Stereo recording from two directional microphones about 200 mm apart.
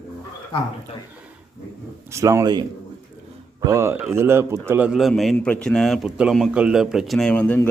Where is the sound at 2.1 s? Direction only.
15° right (ahead or behind).